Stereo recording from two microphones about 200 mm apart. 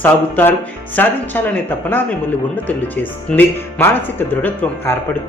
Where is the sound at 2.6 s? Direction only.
10° left (ahead or behind).